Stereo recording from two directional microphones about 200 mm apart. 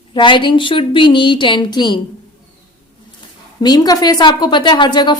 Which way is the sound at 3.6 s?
20° left (ahead or behind).